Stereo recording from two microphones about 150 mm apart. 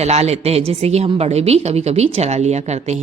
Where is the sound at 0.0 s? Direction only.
45° right (ahead or behind).